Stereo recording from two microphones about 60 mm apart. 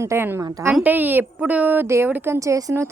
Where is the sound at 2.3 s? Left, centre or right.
Right.